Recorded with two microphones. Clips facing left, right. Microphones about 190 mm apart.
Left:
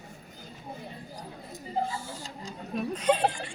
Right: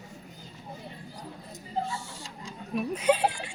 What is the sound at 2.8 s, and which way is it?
Speech, 10° right (ahead or behind).